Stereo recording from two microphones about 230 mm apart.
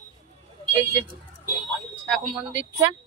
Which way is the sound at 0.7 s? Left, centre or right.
Right.